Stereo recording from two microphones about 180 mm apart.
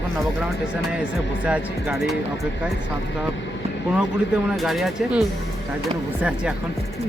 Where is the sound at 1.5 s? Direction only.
5° right (ahead or behind).